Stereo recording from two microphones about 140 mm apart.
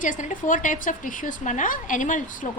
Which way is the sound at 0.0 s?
65° left (ahead or behind).